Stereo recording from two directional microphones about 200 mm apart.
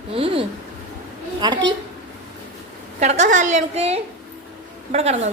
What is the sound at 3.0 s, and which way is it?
A woman's voice, 35° right (ahead or behind).